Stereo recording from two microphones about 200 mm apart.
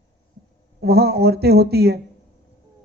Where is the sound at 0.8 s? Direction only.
55° right (ahead or behind).